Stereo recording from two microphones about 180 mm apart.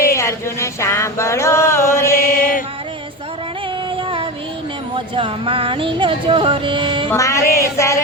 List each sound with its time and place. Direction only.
0.0 s a sound: 15° left (ahead or behind)
2.1 s mantra: 50° left (ahead or behind)
3.9 s child singing: 30° right (ahead or behind)
4.9 s speech: 30° right (ahead or behind)
7.1 s speech: 15° left (ahead or behind)